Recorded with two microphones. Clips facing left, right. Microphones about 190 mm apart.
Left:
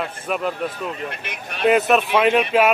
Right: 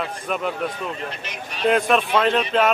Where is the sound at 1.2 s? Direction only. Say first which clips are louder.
Left 3 dB; 55° left (ahead or behind).